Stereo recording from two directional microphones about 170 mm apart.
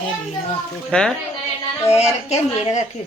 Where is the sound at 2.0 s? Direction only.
40° left (ahead or behind).